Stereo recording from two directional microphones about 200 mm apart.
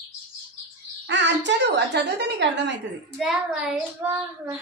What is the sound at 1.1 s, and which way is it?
A woman's voice, 65° right (ahead or behind).